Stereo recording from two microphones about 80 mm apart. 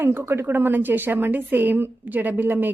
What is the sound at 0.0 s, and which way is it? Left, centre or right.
A woman's voice, right.